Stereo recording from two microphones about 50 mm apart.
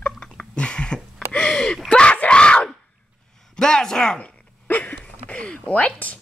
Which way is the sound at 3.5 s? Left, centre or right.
Centre.